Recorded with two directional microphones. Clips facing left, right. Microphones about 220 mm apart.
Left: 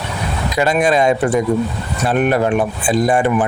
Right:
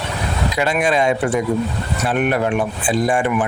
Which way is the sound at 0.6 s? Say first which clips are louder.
Left 4 dB; 40° left (ahead or behind).